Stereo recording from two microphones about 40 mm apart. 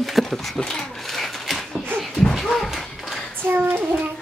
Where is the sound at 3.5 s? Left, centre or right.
Right.